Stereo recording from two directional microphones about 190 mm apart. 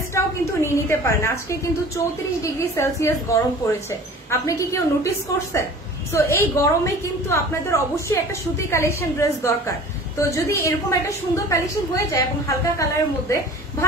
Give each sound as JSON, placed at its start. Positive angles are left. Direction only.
{"t": 0.1, "sound": "a woman's voice", "side_deg": 15}